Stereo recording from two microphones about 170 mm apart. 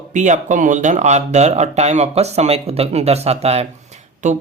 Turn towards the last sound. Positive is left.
turn(degrees=-45)  # may be behind; listen again after turning